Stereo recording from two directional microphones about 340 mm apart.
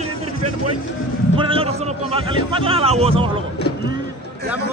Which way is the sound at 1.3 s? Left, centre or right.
Centre.